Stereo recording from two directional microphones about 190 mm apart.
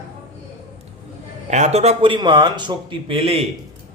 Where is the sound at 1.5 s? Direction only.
35° right (ahead or behind).